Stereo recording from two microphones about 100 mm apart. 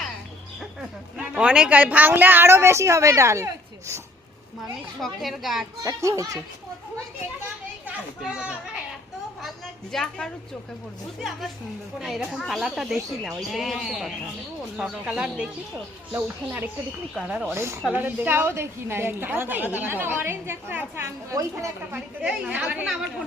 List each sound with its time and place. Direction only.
1.1 s a woman's voice: 10° right (ahead or behind); by 4.0 s 30° right (ahead or behind)
4.9 s speech: centre (ahead or behind)
5.8 s a child's voice: 35° right (ahead or behind)
8.2 s a woman's voice: 10° right (ahead or behind)
9.9 s a woman's voice: 5° left (ahead or behind); by 15.4 s 10° right (ahead or behind)
17.2 s a woman's voice: 5° right (ahead or behind)
17.5 s a woman's voice: 25° right (ahead or behind)
22.2 s a woman's voice: 10° right (ahead or behind)